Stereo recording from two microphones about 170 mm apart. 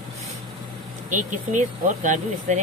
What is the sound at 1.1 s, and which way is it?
Speech, 50° right (ahead or behind).